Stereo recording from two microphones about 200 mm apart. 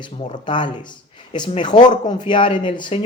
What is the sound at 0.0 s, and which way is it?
Speech, 25° left (ahead or behind).